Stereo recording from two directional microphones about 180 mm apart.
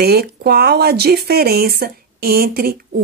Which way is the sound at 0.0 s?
60° right (ahead or behind).